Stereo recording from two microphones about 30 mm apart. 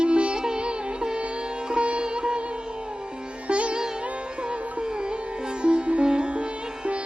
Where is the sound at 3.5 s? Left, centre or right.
Right.